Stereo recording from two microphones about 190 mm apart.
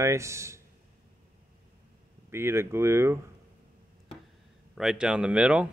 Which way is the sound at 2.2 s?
15° right (ahead or behind).